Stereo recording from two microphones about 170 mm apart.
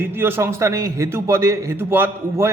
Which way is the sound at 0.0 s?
15° right (ahead or behind).